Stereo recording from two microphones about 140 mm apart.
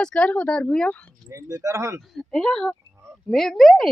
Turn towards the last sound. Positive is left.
turn(degrees=0)  # may be behind; listen again after turning